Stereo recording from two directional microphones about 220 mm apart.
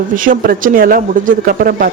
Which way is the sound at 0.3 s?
40° right (ahead or behind).